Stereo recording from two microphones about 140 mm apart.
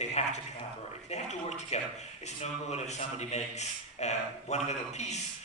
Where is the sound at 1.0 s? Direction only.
50° left (ahead or behind).